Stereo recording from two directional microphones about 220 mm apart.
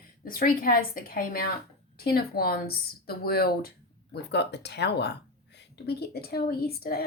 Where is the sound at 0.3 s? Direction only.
40° left (ahead or behind).